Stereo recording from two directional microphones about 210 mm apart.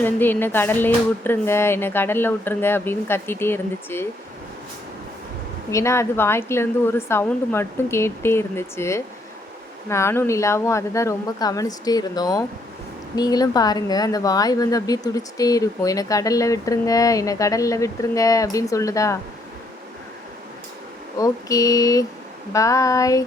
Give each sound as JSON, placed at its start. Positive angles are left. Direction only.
{"t": 0.0, "sound": "speech", "side_deg": 10}
{"t": 5.7, "sound": "speech", "side_deg": 15}
{"t": 21.2, "sound": "speech", "side_deg": 15}